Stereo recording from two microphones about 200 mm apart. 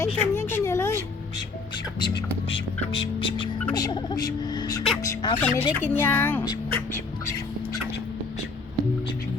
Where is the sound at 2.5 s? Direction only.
25° left (ahead or behind).